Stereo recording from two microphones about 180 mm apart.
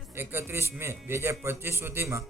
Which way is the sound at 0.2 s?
10° right (ahead or behind).